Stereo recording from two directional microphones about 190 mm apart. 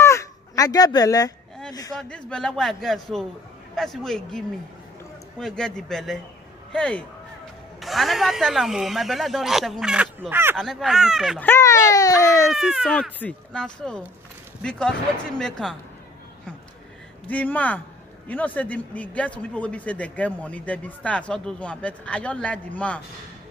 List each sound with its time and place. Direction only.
0.0 s fowl: 15° left (ahead or behind)
2.0 s speech: 5° left (ahead or behind); by 10.6 s 10° right (ahead or behind)
10.6 s speech: centre (ahead or behind)
11.4 s a man's voice: 15° left (ahead or behind)
12.5 s speech: 5° right (ahead or behind)
17.3 s a man's voice: 10° left (ahead or behind)